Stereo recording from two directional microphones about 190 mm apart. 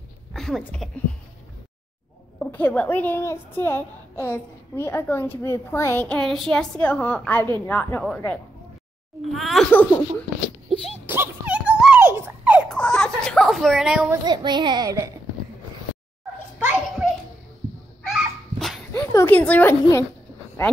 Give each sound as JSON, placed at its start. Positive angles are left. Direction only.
{"t": 0.3, "sound": "a sound", "side_deg": 0}
{"t": 2.3, "sound": "a woman's voice", "side_deg": 5}
{"t": 9.2, "sound": "speech", "side_deg": 0}
{"t": 11.1, "sound": "a sound", "side_deg": -10}
{"t": 12.7, "sound": "a sound", "side_deg": 5}
{"t": 14.2, "sound": "a woman's voice", "side_deg": -25}
{"t": 16.5, "sound": "children playing", "side_deg": -10}
{"t": 18.0, "sound": "dog", "side_deg": 0}
{"t": 19.1, "sound": "a woman's voice", "side_deg": 10}